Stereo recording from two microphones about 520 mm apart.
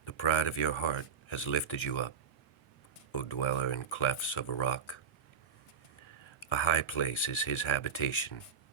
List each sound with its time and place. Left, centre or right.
0.0 s speech: left
6.2 s speech: left